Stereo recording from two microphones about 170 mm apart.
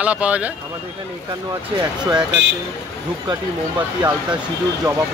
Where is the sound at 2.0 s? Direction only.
25° right (ahead or behind).